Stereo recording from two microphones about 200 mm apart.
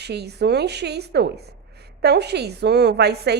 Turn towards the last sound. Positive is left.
turn(degrees=-55)  # may be behind; listen again after turning